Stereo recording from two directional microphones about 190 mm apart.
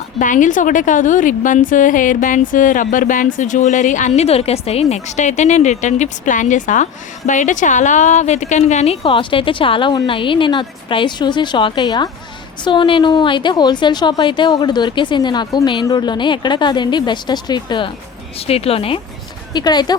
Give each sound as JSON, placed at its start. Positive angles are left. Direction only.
{"t": 0.2, "sound": "a woman's voice", "side_deg": 40}